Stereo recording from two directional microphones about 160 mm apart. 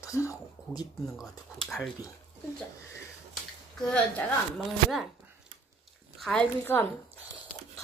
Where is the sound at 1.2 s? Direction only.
Centre (ahead or behind).